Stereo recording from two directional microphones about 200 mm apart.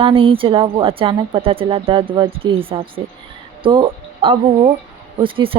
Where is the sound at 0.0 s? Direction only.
25° right (ahead or behind).